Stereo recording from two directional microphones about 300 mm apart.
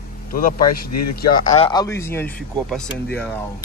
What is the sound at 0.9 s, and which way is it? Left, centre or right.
Speech, left.